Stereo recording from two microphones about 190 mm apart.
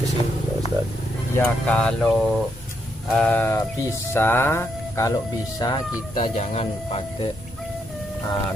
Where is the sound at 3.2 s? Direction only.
10° left (ahead or behind); by 7.3 s 30° left (ahead or behind).